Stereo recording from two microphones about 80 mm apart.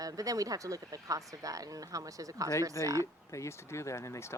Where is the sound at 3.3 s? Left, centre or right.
Left.